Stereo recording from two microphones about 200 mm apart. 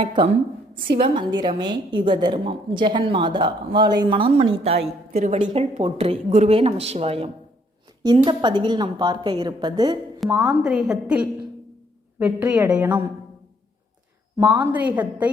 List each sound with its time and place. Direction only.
0.1 s a woman's voice: 25° right (ahead or behind)
5.1 s speech: 40° right (ahead or behind)
5.4 s a woman's voice: 25° right (ahead or behind)
10.6 s a woman's voice: 5° right (ahead or behind)
14.3 s a woman's voice: 10° right (ahead or behind)